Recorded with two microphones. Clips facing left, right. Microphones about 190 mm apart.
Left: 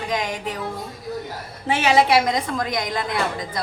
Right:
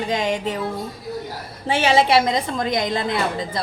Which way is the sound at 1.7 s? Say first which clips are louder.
Right 1 dB; 30° right (ahead or behind).